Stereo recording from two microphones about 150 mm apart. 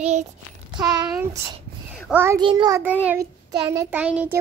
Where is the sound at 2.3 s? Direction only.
30° right (ahead or behind).